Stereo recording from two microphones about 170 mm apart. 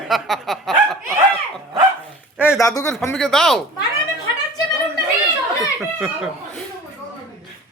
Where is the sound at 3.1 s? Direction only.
Centre (ahead or behind).